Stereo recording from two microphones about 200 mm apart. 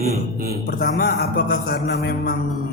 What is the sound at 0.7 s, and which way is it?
A man's voice, 50° left (ahead or behind).